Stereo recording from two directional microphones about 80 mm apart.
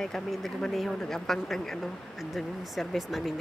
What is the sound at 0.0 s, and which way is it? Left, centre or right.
Speech, centre.